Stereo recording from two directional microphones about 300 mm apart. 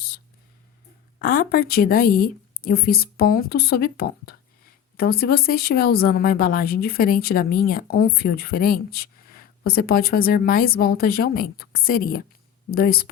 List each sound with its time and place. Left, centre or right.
1.2 s a woman's voice: left